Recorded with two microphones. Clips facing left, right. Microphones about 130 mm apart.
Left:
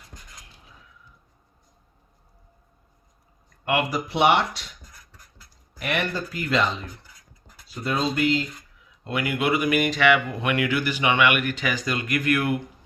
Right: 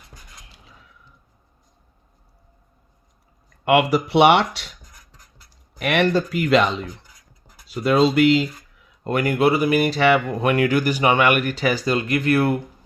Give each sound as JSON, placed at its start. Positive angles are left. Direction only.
{"t": 3.7, "sound": "speech", "side_deg": -75}
{"t": 4.8, "sound": "beatboxing", "side_deg": -15}
{"t": 5.8, "sound": "speech", "side_deg": -65}
{"t": 7.0, "sound": "a sound", "side_deg": -15}
{"t": 7.7, "sound": "speech", "side_deg": -75}
{"t": 9.0, "sound": "speech", "side_deg": -45}